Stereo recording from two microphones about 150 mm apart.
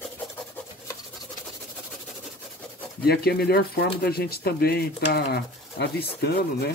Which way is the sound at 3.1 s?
90° left.